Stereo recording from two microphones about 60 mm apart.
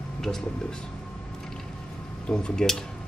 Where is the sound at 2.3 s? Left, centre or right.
Centre.